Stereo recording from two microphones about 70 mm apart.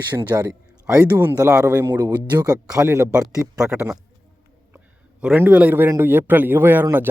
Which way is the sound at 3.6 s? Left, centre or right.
Centre.